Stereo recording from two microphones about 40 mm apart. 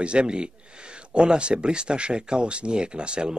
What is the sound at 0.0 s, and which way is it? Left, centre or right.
A man's voice, right.